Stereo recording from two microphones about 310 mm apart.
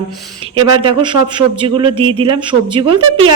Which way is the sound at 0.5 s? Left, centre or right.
Centre.